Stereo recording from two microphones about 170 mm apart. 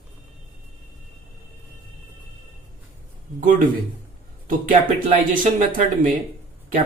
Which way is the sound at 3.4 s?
50° right (ahead or behind).